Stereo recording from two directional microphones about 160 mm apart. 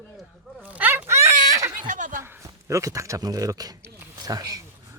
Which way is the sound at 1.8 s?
55° right (ahead or behind).